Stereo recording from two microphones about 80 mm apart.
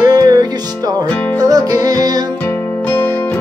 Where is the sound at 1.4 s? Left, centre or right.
Right.